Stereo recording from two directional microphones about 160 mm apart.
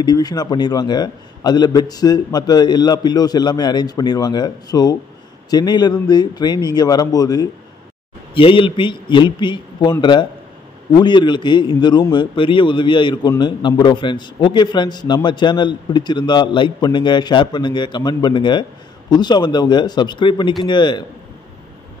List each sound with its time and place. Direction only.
0.0 s a man's voice: 25° left (ahead or behind)